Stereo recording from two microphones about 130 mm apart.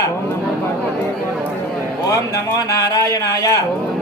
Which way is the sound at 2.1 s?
25° left (ahead or behind).